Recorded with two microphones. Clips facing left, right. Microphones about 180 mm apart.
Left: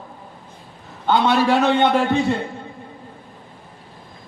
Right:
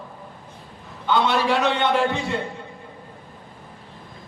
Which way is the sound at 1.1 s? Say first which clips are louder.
Left 4 dB; 45° left (ahead or behind).